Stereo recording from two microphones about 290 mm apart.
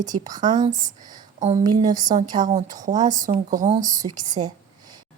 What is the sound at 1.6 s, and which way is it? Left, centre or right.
Speech, centre.